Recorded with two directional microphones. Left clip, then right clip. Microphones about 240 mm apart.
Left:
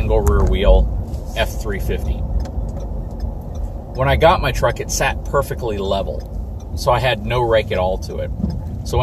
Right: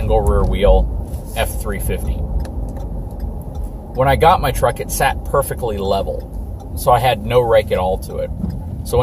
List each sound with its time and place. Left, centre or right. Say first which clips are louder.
0.1 s speech: right 2 dB; centre
4.0 s speech: right 2 dB; centre